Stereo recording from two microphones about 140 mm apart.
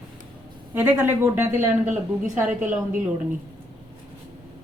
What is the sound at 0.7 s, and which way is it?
A woman's voice, 15° right (ahead or behind).